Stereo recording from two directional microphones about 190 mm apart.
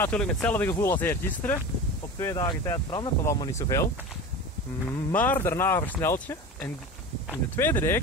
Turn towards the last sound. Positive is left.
turn(degrees=10)  # may be behind; listen again after turning